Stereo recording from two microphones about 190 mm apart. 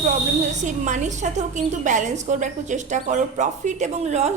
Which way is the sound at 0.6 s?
40° right (ahead or behind).